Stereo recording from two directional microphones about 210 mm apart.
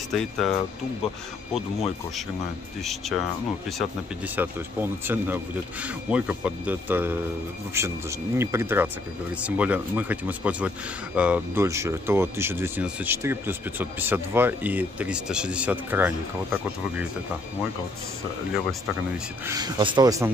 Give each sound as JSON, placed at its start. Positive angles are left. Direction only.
{"t": 0.1, "sound": "speech", "side_deg": 0}
{"t": 4.4, "sound": "speech", "side_deg": -10}
{"t": 19.4, "sound": "speech", "side_deg": -20}